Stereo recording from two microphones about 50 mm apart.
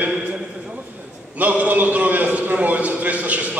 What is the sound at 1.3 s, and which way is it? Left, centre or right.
A man's voice, right.